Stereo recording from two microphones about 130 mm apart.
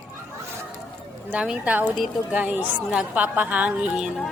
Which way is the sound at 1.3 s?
10° right (ahead or behind).